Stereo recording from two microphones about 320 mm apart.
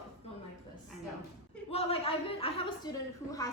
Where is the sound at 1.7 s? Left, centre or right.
Centre.